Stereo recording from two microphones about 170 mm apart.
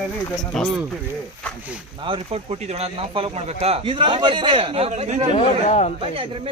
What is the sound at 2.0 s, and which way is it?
Speech, 35° right (ahead or behind).